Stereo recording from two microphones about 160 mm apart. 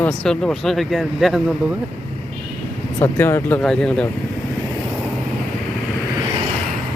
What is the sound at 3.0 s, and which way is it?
Speech, 15° left (ahead or behind).